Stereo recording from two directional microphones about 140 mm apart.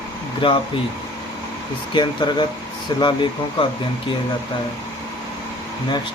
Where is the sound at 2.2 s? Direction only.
30° left (ahead or behind).